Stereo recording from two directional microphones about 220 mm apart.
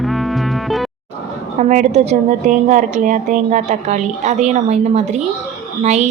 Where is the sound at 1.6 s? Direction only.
35° right (ahead or behind).